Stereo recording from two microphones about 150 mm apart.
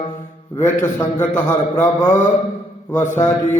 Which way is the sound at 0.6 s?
15° left (ahead or behind).